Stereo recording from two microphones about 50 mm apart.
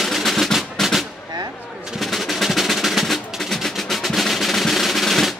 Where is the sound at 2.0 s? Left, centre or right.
Centre.